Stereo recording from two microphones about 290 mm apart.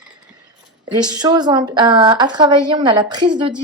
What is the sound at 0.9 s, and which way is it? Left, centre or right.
Speech, centre.